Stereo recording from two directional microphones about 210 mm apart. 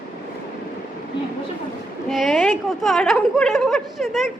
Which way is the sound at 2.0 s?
Centre (ahead or behind).